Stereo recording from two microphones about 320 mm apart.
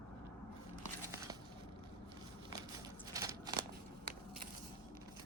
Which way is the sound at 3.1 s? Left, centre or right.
Centre.